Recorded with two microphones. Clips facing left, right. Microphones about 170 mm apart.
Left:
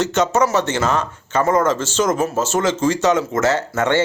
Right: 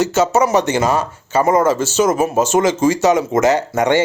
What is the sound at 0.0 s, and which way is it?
Speech, 5° right (ahead or behind).